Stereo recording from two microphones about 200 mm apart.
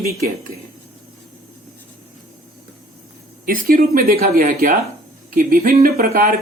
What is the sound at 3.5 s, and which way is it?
Speech, 45° right (ahead or behind).